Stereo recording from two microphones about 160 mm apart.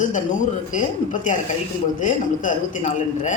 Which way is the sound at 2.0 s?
50° left (ahead or behind).